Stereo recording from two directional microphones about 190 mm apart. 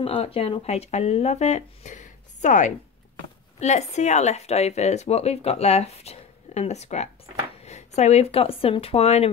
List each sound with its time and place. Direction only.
0.0 s speech: 30° left (ahead or behind)